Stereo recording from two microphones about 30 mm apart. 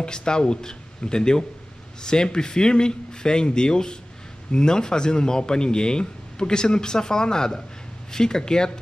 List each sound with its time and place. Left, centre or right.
0.0 s speech: left